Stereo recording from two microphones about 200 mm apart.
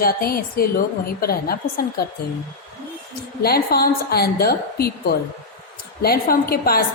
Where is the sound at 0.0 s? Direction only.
50° left (ahead or behind).